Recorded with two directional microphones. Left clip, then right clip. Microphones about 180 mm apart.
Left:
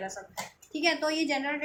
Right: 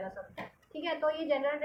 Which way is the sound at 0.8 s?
45° left (ahead or behind).